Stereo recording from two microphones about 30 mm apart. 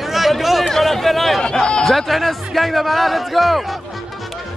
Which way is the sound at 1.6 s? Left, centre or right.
Left.